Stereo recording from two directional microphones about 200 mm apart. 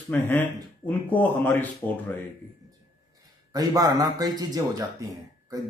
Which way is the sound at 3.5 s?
20° right (ahead or behind).